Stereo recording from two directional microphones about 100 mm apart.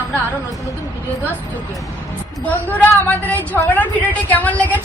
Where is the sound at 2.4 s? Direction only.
15° left (ahead or behind).